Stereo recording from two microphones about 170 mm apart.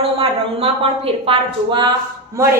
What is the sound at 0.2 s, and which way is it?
A woman's voice, 35° right (ahead or behind).